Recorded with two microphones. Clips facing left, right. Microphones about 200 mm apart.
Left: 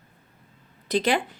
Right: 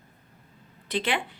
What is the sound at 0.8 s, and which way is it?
Speech, 40° left (ahead or behind).